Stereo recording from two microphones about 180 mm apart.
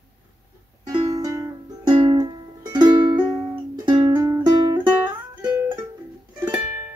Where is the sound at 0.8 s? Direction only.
20° right (ahead or behind).